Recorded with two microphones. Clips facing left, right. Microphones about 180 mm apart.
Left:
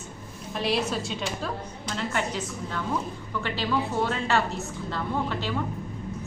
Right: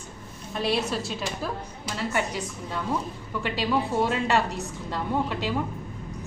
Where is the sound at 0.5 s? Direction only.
Centre (ahead or behind).